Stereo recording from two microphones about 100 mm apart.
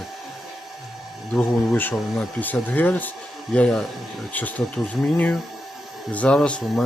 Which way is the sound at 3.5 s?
10° left (ahead or behind).